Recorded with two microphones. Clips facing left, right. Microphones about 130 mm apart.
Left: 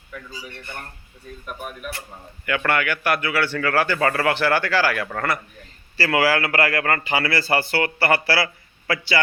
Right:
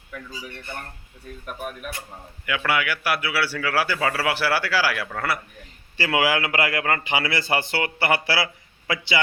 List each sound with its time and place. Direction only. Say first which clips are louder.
2.5 s a man's voice: left 2 dB; 5° right (ahead or behind)